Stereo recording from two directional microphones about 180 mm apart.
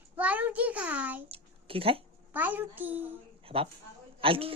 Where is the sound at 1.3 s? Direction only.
30° right (ahead or behind).